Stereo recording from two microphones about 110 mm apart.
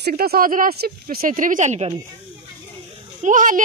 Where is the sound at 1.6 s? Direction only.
90° right.